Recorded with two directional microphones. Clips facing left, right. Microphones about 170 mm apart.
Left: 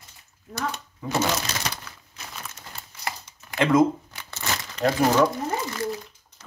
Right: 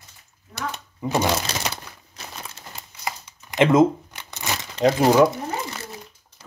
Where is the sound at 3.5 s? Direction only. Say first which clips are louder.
Right 3 dB; 20° right (ahead or behind).